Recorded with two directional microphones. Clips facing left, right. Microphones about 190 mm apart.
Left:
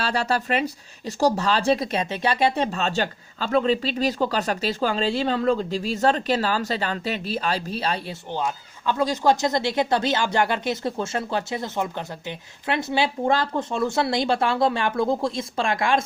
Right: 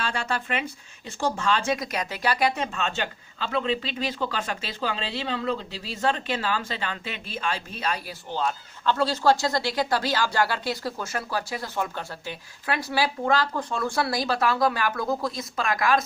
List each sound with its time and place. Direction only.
0.0 s speech: 35° left (ahead or behind)
8.3 s speech: 15° left (ahead or behind)